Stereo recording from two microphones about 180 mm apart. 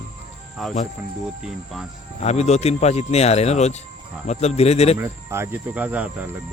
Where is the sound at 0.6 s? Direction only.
Centre (ahead or behind).